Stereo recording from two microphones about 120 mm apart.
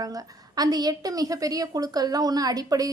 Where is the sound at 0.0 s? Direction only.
30° right (ahead or behind).